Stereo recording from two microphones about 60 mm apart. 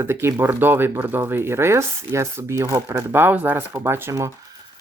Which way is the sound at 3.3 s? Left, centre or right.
Right.